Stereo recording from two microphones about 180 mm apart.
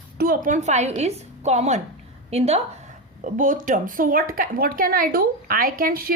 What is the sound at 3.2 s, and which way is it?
A woman's voice, 50° right (ahead or behind).